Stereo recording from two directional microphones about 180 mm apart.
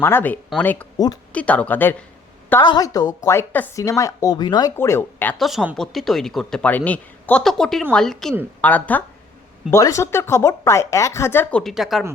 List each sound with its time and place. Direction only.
0.0 s speech: 10° left (ahead or behind)
0.9 s speech: 20° left (ahead or behind)
1.3 s speech: 10° left (ahead or behind)
2.6 s a woman's voice: 25° left (ahead or behind)
5.4 s speech: centre (ahead or behind)
11.6 s speech: centre (ahead or behind)